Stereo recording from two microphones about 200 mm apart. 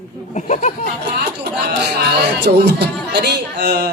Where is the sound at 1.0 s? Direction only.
55° right (ahead or behind).